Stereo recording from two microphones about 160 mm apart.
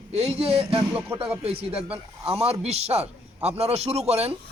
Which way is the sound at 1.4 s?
35° right (ahead or behind).